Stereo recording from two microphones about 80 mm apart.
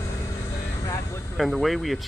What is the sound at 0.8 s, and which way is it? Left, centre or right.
Vehicle, left.